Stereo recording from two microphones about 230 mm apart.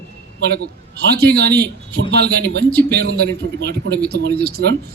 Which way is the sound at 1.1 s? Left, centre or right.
Right.